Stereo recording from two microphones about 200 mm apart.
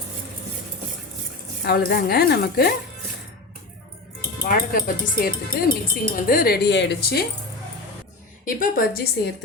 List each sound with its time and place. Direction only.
1.6 s speech: 50° left (ahead or behind)
4.4 s speech: 45° left (ahead or behind)
8.4 s speech: 45° left (ahead or behind)